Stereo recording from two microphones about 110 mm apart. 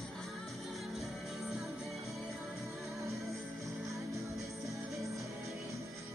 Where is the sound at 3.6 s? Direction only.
30° right (ahead or behind).